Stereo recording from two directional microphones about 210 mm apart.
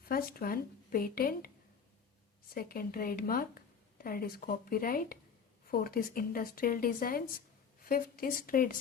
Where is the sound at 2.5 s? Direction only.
45° left (ahead or behind).